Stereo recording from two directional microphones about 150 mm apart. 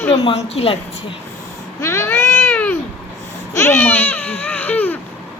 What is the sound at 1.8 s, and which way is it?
Cat, 20° left (ahead or behind).